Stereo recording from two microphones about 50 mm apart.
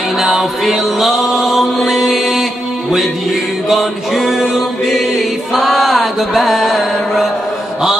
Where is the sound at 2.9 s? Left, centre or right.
Centre.